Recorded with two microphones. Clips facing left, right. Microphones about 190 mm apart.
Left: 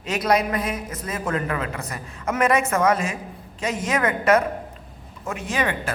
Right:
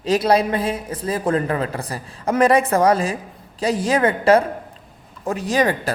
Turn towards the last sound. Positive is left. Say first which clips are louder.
# right 6 dB
turn(degrees=-35)  # may be behind; listen again after turning